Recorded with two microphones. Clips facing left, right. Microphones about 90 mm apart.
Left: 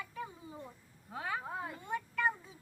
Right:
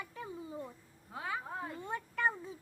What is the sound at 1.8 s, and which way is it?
Speech, 30° right (ahead or behind).